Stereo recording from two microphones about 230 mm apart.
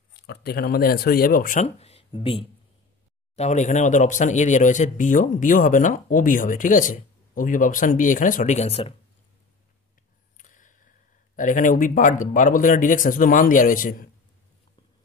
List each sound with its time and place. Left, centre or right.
0.3 s speech: left
10.3 s a sound: left
11.3 s speech: left